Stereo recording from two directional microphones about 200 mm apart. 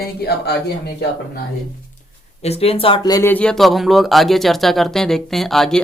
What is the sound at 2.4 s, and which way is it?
Speech, 30° left (ahead or behind).